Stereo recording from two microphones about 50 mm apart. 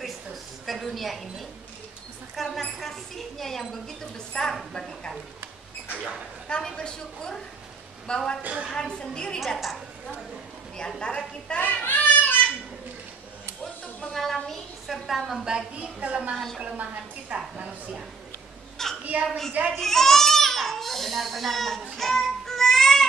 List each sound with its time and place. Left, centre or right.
0.0 s a sound: centre
2.3 s a woman's voice: centre
5.9 s speech: right
6.5 s a woman's voice: centre
8.4 s a woman's voice: right
8.7 s a woman's voice: centre
9.6 s a woman's voice: centre
11.0 s a woman's voice: centre
11.6 s a sound: left
14.1 s a woman's voice: centre
15.4 s a woman's voice: centre
18.8 s a sound: centre
19.2 s a woman's voice: centre
19.7 s crying: centre